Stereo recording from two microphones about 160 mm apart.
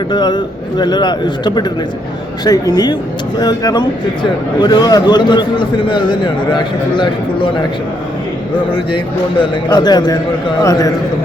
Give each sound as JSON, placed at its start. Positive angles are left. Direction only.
{"t": 0.1, "sound": "speech", "side_deg": 30}
{"t": 9.4, "sound": "speech", "side_deg": 25}